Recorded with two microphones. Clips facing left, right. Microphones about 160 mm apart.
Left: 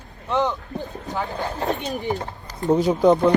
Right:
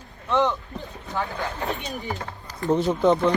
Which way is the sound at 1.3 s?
35° left (ahead or behind).